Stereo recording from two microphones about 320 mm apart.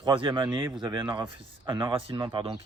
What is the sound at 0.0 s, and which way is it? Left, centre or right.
Speech, centre.